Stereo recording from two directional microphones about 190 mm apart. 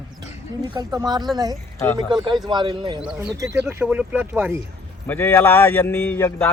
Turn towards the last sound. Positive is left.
turn(degrees=10)  # may be behind; listen again after turning